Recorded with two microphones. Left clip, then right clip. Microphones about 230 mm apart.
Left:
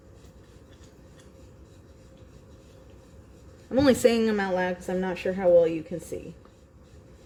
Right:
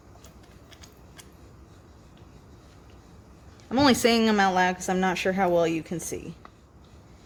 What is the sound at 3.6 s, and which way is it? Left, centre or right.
Speech, centre.